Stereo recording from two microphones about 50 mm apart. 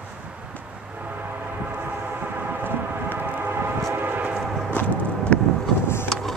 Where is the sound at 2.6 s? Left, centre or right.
Right.